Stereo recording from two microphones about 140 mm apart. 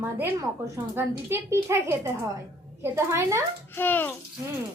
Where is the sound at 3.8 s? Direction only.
15° left (ahead or behind).